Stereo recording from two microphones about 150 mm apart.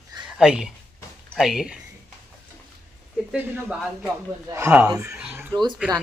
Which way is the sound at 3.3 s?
10° right (ahead or behind).